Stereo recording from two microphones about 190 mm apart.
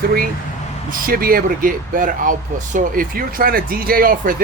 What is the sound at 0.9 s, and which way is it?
Speech, 50° right (ahead or behind).